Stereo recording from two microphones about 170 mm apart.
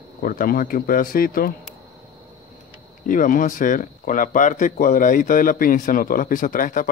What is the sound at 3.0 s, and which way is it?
Speech, 50° left (ahead or behind).